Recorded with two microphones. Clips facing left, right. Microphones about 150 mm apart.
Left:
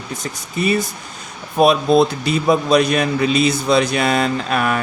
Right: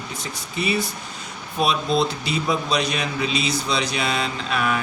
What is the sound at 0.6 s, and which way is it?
A man's voice, 45° left (ahead or behind).